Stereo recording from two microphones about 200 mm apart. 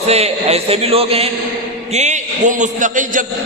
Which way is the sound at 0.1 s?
30° right (ahead or behind).